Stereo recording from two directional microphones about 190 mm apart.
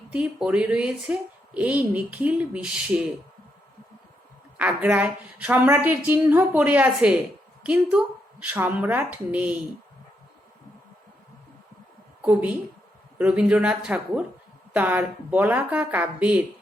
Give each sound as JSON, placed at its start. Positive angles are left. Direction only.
{"t": 0.1, "sound": "a woman's voice", "side_deg": -5}
{"t": 4.5, "sound": "a woman's voice", "side_deg": -5}
{"t": 12.2, "sound": "a woman's voice", "side_deg": -10}